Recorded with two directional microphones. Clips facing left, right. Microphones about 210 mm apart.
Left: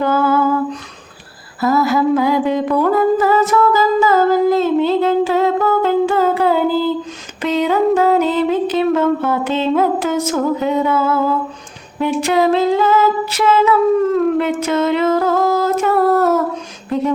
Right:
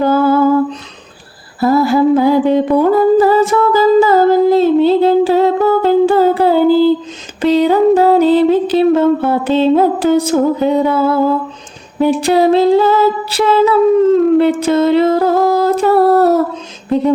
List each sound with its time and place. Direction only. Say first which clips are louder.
0.0 s lullaby: right 4 dB; 35° right (ahead or behind)
1.6 s humming: right 4 dB; 30° right (ahead or behind)
7.4 s music: right 5 dB; 35° right (ahead or behind)
11.9 s humming: right 4 dB; 35° right (ahead or behind)